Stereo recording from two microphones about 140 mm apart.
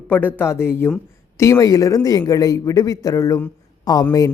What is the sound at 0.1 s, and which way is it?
Speech, 15° left (ahead or behind).